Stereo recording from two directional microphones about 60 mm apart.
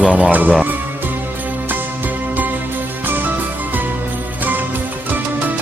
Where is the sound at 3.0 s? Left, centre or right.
Right.